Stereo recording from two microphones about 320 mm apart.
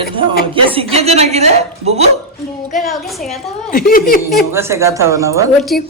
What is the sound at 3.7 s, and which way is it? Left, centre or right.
Speech, left.